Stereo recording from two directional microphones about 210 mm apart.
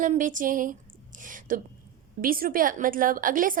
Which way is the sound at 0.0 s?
40° right (ahead or behind).